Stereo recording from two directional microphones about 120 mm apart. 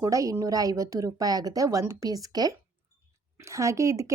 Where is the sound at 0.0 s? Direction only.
25° right (ahead or behind).